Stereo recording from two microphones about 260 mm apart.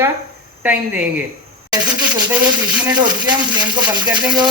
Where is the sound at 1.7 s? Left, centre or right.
Centre.